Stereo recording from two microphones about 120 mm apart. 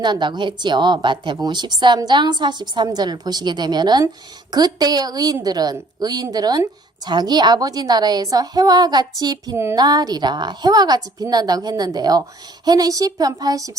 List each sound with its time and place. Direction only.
0.0 s a woman's voice: 40° right (ahead or behind)